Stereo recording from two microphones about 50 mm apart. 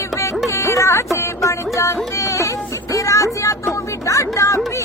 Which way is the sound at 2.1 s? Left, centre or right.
Left.